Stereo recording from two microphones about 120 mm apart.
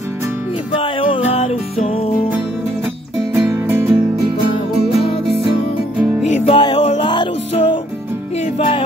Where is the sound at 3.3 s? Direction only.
20° right (ahead or behind).